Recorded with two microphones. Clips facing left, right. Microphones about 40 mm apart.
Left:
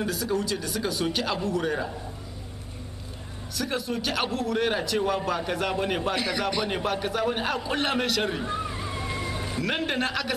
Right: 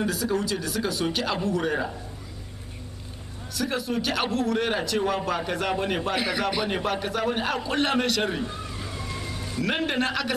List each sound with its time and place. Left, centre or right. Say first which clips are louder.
0.0 s a man's voice: right 1 dB; centre
3.5 s a man's voice: right 2 dB; centre
8.5 s slosh: left 5 dB; centre
9.6 s a man's voice: right 2 dB; centre